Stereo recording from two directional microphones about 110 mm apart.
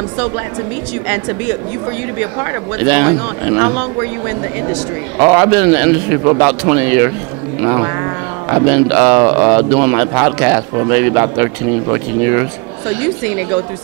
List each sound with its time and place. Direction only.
2.8 s a man's voice: 20° right (ahead or behind)
5.2 s a man's voice: 15° right (ahead or behind)